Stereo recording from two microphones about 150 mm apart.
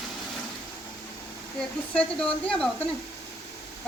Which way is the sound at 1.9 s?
5° left (ahead or behind).